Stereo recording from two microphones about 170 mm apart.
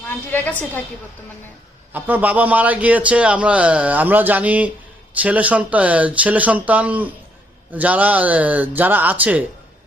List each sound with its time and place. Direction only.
0.1 s a woman's voice: 10° left (ahead or behind)
1.9 s a man's voice: 10° right (ahead or behind)